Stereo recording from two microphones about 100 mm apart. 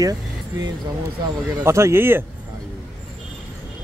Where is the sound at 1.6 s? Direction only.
30° right (ahead or behind).